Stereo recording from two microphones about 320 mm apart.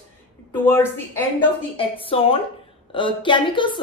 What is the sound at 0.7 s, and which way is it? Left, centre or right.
Speech, centre.